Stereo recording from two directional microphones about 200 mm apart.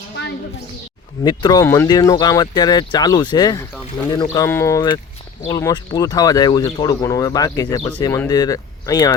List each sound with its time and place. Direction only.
1.2 s speech: 20° left (ahead or behind)